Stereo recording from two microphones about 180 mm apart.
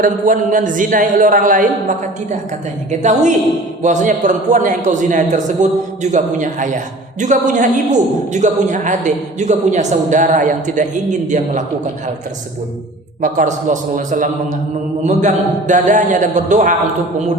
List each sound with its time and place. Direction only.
0.0 s a man's voice: 45° right (ahead or behind)
2.9 s a man's voice: 40° right (ahead or behind)
13.2 s a man's voice: 45° right (ahead or behind)